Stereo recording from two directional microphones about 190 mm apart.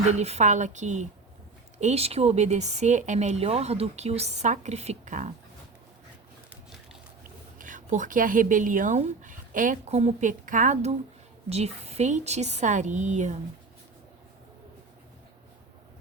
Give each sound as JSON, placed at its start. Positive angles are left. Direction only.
{"t": 0.1, "sound": "speech", "side_deg": -35}
{"t": 7.6, "sound": "speech", "side_deg": -40}